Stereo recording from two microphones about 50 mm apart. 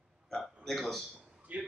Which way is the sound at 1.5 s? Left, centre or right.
Right.